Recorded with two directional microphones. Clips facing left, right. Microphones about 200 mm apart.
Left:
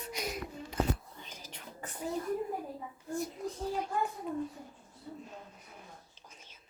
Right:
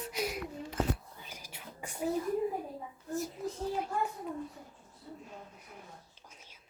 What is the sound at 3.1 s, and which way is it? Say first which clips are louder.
Child singing: even; centre (ahead or behind).